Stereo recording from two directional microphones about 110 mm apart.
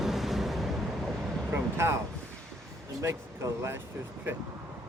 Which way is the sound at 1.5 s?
20° right (ahead or behind).